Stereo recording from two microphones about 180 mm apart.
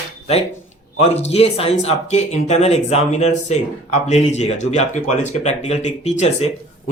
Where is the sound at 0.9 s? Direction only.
35° left (ahead or behind).